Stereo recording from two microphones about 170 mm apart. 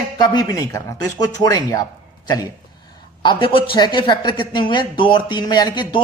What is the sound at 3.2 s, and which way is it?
Speech, 30° left (ahead or behind).